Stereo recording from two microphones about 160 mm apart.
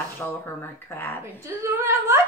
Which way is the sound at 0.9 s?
15° left (ahead or behind).